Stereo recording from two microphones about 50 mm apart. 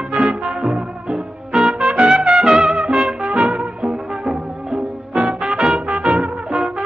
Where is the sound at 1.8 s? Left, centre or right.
Centre.